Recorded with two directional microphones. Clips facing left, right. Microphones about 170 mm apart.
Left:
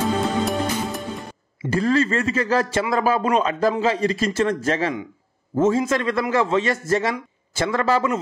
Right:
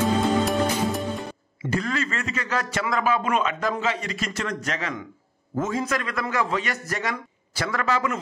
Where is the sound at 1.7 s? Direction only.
30° left (ahead or behind).